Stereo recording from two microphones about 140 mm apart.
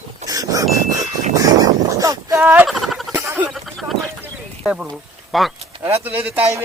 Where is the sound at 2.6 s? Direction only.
Centre (ahead or behind).